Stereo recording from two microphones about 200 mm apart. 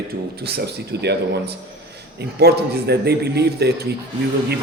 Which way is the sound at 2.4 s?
55° right (ahead or behind).